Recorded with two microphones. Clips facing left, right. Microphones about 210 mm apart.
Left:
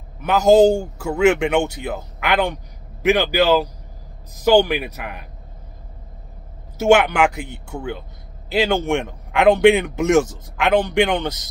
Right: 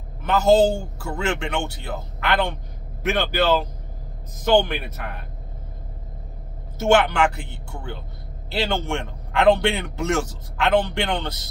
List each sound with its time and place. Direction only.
0.3 s a man's voice: 15° left (ahead or behind)
6.8 s a man's voice: 10° left (ahead or behind)